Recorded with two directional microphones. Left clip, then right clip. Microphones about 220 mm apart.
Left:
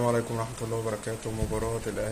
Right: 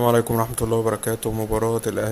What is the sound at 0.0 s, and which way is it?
Speech, 40° right (ahead or behind).